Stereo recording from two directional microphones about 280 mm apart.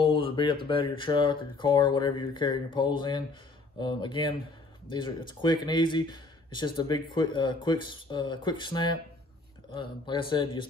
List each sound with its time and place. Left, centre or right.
0.0 s speech: centre